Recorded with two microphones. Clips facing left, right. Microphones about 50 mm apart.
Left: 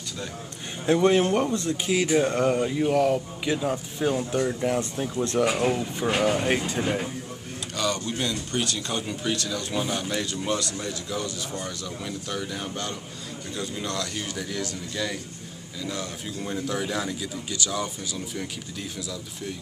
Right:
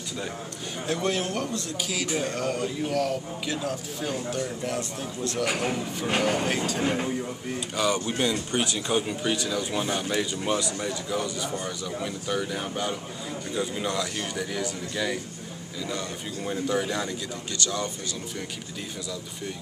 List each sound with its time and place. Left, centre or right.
0.8 s speech: left
6.0 s a man's voice: centre
6.4 s speech: centre
7.7 s a man's voice: centre